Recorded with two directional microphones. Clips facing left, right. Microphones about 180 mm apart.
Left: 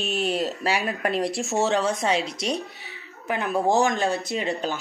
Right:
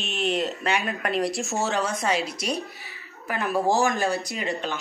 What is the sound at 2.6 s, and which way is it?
Speech, 20° left (ahead or behind).